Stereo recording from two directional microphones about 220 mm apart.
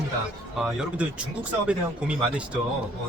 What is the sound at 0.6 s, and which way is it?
Speech, 5° right (ahead or behind).